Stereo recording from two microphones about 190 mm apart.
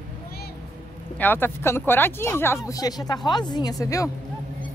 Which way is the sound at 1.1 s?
10° left (ahead or behind).